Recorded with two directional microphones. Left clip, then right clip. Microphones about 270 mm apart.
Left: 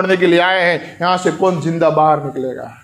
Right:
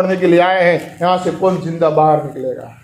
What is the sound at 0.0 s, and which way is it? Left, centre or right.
A man's voice, left.